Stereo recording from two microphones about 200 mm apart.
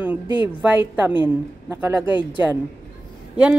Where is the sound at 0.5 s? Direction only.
10° right (ahead or behind).